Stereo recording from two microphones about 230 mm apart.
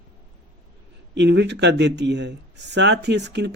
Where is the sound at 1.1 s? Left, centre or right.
Right.